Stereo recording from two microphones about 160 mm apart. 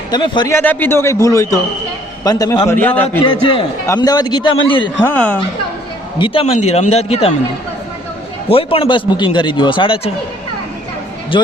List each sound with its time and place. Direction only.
0.1 s a man's voice: 25° left (ahead or behind)
0.5 s a man's voice: 10° left (ahead or behind); by 4.9 s 30° left (ahead or behind)
5.0 s a man's voice: 10° left (ahead or behind)
6.1 s a man's voice: 30° left (ahead or behind)
8.4 s a man's voice: 35° left (ahead or behind)
11.3 s a man's voice: 30° left (ahead or behind)